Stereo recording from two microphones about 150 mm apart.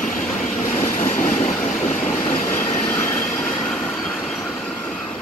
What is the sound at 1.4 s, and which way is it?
Train, 50° left (ahead or behind).